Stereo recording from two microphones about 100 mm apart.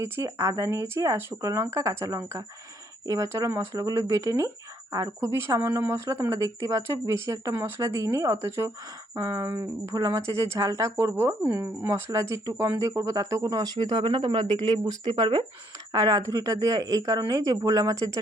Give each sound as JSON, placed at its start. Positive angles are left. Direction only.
{"t": 0.0, "sound": "speech", "side_deg": -35}
{"t": 9.1, "sound": "speech", "side_deg": -35}